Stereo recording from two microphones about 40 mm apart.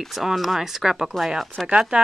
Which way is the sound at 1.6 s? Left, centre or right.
Centre.